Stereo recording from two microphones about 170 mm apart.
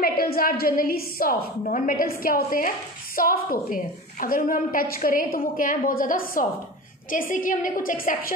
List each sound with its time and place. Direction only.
0.0 s a woman's voice: 60° left (ahead or behind)